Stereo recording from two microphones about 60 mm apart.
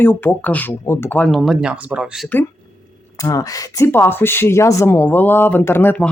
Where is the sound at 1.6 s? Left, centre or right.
Centre.